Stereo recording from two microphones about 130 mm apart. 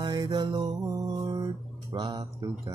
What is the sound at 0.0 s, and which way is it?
Music, 35° right (ahead or behind).